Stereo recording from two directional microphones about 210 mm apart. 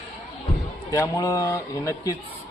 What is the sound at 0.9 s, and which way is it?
A man's voice, 15° left (ahead or behind).